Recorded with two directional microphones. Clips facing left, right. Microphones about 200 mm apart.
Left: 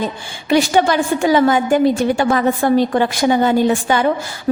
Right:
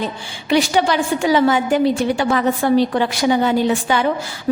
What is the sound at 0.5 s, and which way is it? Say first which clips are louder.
A woman's voice: left 2 dB; 50° left (ahead or behind).